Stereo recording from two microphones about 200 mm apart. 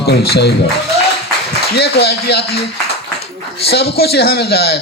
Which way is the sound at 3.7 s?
55° left (ahead or behind).